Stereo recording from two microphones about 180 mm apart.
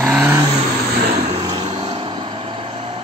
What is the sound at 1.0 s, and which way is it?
Vehicle, 40° right (ahead or behind).